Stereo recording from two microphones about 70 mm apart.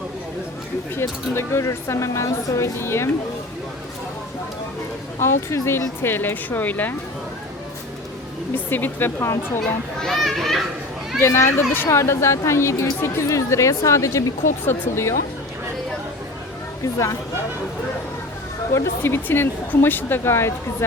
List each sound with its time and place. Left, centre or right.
0.9 s a woman's voice: left
2.7 s speech: left
5.2 s speech: left
8.5 s speech: left
10.0 s a child's voice: centre
11.2 s a woman's voice: left
14.7 s speech: left
18.7 s speech: left